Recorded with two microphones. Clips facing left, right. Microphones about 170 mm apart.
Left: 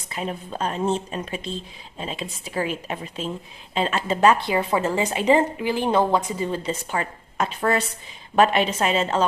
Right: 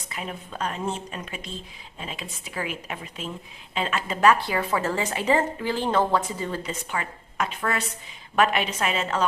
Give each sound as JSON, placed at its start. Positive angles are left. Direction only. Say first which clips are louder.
{"t": 0.1, "sound": "a woman's voice", "louder": "left 5 dB", "side_deg": 30}
{"t": 6.7, "sound": "a woman's voice", "louder": "left 5 dB", "side_deg": 35}